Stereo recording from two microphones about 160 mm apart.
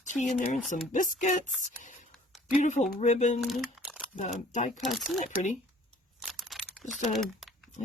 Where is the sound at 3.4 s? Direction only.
Centre (ahead or behind).